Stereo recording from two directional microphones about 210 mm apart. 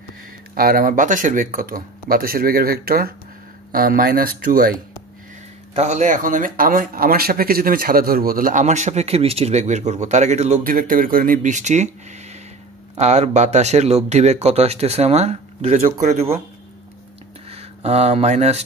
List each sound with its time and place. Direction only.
0.6 s speech: 45° right (ahead or behind)
5.8 s speech: 35° right (ahead or behind)
17.5 s speech: 30° right (ahead or behind)